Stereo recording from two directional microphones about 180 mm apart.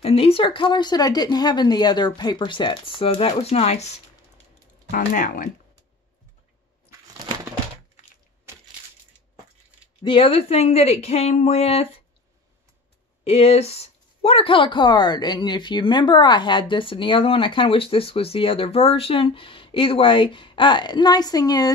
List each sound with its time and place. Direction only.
0.0 s speech: 30° left (ahead or behind)
4.9 s speech: 45° left (ahead or behind)
10.0 s speech: 30° left (ahead or behind)
13.2 s speech: 35° left (ahead or behind)